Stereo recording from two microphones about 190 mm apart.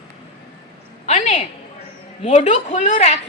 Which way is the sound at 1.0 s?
40° left (ahead or behind).